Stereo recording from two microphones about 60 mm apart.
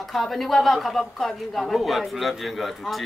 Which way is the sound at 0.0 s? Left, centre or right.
Centre.